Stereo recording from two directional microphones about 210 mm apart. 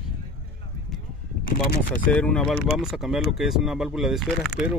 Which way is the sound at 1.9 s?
5° left (ahead or behind).